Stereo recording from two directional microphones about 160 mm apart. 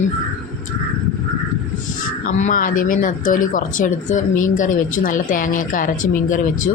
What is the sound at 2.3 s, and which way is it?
Speech, 50° left (ahead or behind).